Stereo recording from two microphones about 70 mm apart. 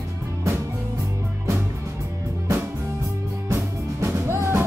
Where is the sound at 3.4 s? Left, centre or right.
Right.